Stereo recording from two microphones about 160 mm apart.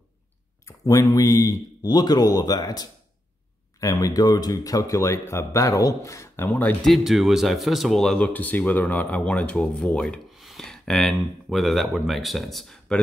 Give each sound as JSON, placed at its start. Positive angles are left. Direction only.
{"t": 0.7, "sound": "speech", "side_deg": 20}